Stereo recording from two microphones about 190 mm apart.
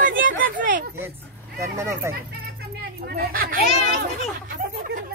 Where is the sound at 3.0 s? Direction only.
50° right (ahead or behind).